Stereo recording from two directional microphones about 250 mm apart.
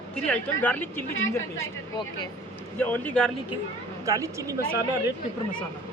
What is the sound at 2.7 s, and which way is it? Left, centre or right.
Speech, centre.